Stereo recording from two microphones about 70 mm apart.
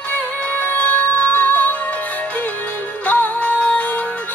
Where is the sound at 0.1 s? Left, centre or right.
Left.